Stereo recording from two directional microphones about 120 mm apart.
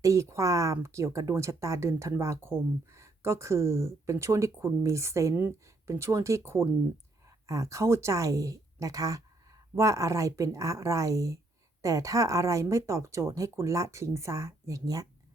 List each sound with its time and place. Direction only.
0.0 s speech: 25° right (ahead or behind)